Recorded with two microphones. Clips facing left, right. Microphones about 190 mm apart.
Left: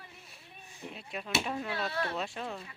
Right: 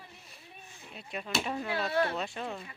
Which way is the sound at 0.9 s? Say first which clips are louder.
Right 1 dB; centre (ahead or behind).